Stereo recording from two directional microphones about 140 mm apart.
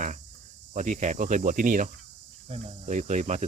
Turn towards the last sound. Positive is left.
turn(degrees=-55)  # may be behind; listen again after turning